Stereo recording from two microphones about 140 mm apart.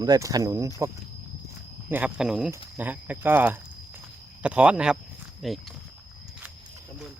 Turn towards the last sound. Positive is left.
turn(degrees=0)  # may be behind; listen again after turning